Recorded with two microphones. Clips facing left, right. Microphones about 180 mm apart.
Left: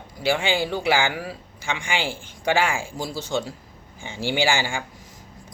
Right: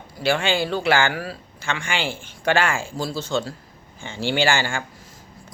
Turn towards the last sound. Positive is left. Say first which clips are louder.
# right 1 dB
turn(degrees=15)  # may be behind; listen again after turning